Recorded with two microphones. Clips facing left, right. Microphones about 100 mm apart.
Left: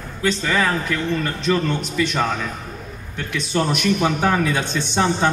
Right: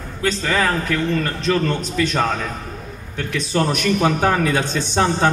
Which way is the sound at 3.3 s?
40° right (ahead or behind).